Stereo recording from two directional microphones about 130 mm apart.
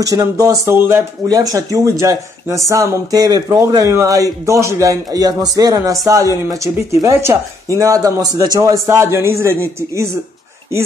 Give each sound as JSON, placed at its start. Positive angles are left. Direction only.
{"t": 0.0, "sound": "speech", "side_deg": -25}